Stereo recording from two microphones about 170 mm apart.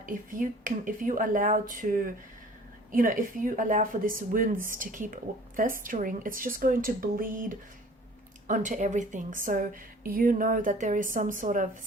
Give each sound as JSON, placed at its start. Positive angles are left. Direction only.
{"t": 0.0, "sound": "a woman's voice", "side_deg": -55}